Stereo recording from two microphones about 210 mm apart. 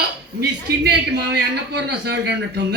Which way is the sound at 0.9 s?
55° right (ahead or behind).